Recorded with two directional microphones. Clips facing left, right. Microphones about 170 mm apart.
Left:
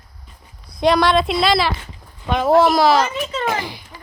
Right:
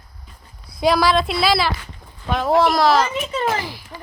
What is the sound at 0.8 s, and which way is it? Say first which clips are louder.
A woman's voice: left 2 dB; centre (ahead or behind).